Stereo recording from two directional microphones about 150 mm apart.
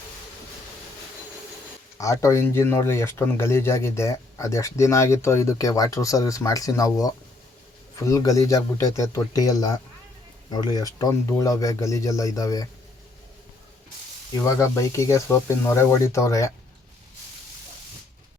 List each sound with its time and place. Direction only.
2.0 s speech: 20° left (ahead or behind)
14.4 s speech: 20° left (ahead or behind)